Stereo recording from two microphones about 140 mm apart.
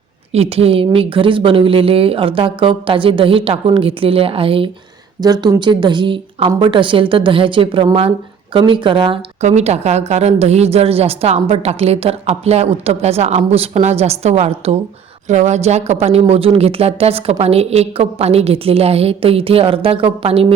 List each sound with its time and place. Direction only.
0.3 s speech: 45° right (ahead or behind)
5.2 s speech: 30° right (ahead or behind)
9.4 s a woman's voice: 55° right (ahead or behind)